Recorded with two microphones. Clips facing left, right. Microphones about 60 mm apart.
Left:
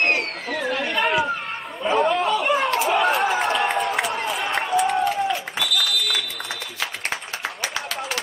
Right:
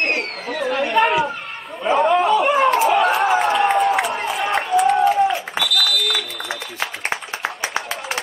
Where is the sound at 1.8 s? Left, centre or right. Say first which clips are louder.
Right 4 dB; centre.